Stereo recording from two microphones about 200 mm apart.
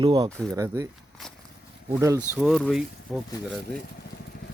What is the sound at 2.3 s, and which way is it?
Speech, 5° right (ahead or behind).